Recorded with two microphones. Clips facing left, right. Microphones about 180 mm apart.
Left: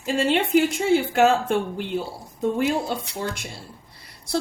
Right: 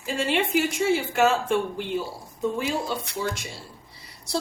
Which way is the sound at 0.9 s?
60° left (ahead or behind).